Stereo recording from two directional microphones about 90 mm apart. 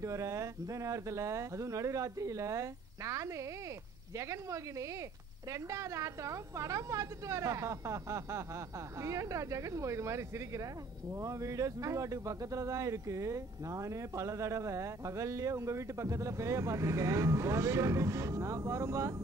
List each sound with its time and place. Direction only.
0.0 s speech: 35° right (ahead or behind)